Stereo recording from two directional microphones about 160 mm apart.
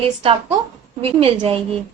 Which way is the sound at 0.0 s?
40° right (ahead or behind).